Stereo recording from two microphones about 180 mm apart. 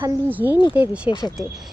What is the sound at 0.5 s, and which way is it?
Speech, 25° left (ahead or behind).